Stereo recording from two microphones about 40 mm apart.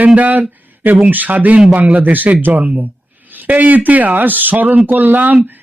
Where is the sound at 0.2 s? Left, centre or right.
Right.